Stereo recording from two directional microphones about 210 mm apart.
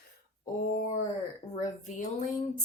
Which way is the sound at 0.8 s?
35° left (ahead or behind).